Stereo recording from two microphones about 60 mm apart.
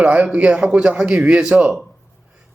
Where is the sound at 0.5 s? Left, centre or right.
Centre.